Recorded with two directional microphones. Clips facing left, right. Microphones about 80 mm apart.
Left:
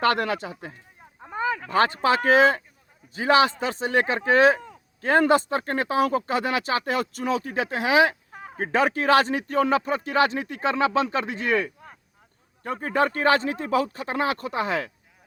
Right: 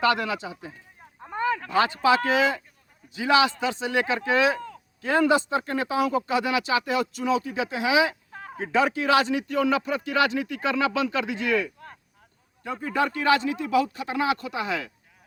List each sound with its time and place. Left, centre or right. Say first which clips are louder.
0.0 s speech: left 1 dB; left
1.2 s a sound: right 1 dB; centre
1.7 s speech: even; left